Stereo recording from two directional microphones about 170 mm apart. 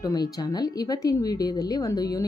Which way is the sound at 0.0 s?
20° left (ahead or behind).